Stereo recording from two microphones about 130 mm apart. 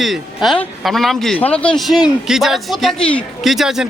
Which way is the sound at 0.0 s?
Centre (ahead or behind).